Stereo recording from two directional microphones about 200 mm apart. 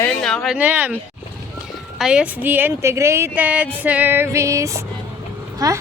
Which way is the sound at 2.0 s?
5° right (ahead or behind).